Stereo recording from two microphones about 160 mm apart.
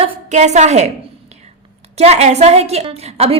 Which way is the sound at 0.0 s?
45° right (ahead or behind).